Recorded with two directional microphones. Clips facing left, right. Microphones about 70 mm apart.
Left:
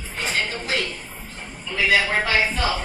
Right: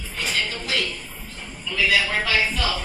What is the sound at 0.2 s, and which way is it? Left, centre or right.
Music, left.